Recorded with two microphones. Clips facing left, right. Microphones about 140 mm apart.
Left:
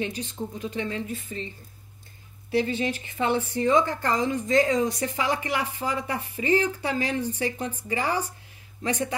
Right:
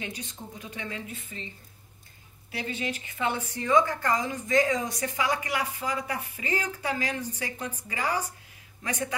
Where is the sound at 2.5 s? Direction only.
30° left (ahead or behind).